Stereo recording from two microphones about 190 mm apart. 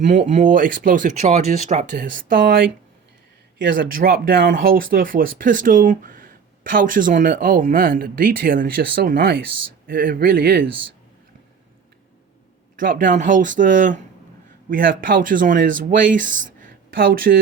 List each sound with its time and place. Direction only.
0.0 s speech: 40° right (ahead or behind)
3.8 s speech: 50° right (ahead or behind)
12.7 s speech: 45° right (ahead or behind)
16.6 s a sound: 45° right (ahead or behind)